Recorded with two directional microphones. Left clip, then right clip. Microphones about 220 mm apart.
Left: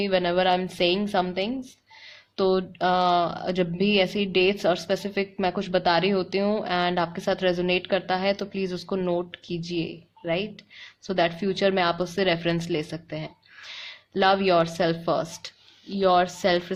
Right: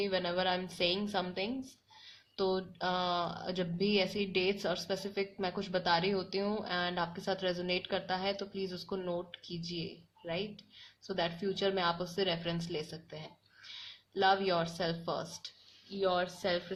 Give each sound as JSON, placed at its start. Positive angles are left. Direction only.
{"t": 0.0, "sound": "speech", "side_deg": 35}